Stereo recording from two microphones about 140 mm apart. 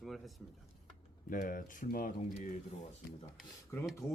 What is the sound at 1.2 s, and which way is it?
Speech, 80° left.